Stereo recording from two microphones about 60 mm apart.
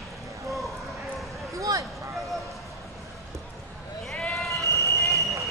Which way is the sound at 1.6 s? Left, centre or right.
Right.